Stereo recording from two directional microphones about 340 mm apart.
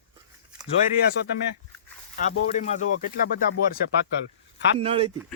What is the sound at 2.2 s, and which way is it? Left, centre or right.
Speech, centre.